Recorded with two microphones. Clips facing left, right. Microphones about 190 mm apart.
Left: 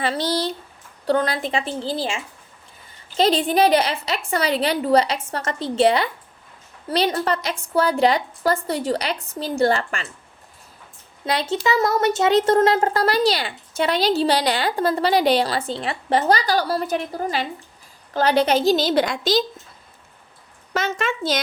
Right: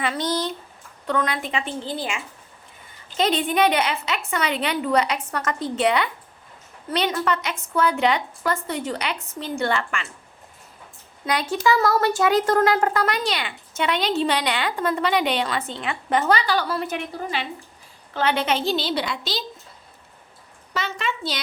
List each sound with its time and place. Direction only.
0.0 s speech: 30° left (ahead or behind)
11.3 s a woman's voice: 25° left (ahead or behind); by 19.5 s 45° left (ahead or behind)
20.7 s a woman's voice: 45° left (ahead or behind)